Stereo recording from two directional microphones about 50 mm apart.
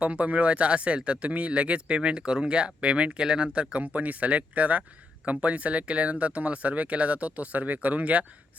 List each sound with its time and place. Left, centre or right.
0.0 s speech: right